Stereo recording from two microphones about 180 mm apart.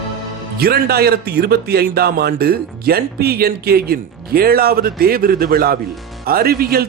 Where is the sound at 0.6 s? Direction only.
60° right (ahead or behind).